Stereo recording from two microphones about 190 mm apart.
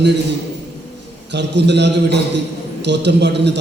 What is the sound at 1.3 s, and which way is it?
A man's voice, 65° right (ahead or behind).